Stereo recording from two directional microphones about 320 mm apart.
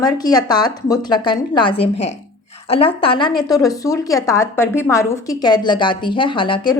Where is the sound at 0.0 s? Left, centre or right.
Centre.